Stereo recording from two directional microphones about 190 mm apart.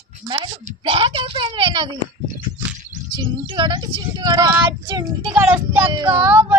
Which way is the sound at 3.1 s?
25° right (ahead or behind).